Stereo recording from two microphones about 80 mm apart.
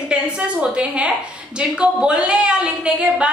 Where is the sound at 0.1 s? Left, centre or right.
Centre.